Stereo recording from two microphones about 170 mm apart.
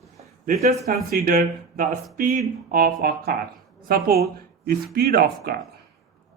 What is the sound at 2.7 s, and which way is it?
A woman's voice, 60° right (ahead or behind).